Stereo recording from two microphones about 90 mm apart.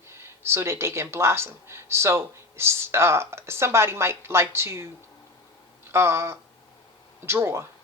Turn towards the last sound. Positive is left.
turn(degrees=-30)  # may be behind; listen again after turning